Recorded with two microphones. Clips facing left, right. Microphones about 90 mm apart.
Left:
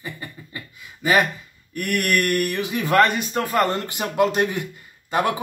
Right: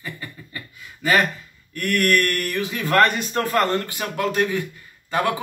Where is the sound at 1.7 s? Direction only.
15° left (ahead or behind).